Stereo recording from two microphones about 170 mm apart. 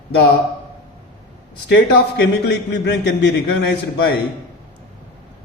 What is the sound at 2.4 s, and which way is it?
Speech, 85° left.